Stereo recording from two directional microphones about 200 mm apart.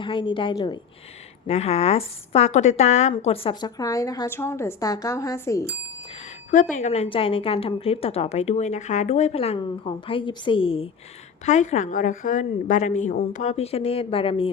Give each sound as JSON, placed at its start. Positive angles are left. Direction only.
{"t": 0.0, "sound": "a woman's voice", "side_deg": 25}
{"t": 1.5, "sound": "a woman's voice", "side_deg": 30}
{"t": 6.5, "sound": "a woman's voice", "side_deg": 40}